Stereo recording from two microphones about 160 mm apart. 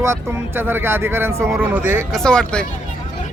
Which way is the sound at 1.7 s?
10° right (ahead or behind).